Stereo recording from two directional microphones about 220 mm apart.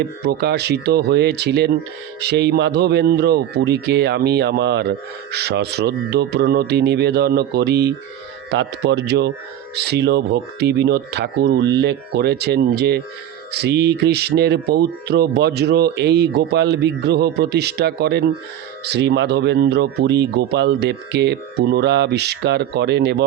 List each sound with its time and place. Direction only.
0.0 s speech: 50° right (ahead or behind)